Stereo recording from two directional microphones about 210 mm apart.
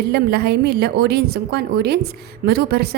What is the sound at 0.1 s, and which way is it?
A woman's voice, 50° right (ahead or behind).